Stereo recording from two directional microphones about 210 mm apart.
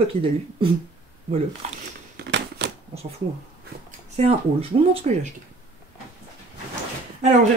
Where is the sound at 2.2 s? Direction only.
55° right (ahead or behind).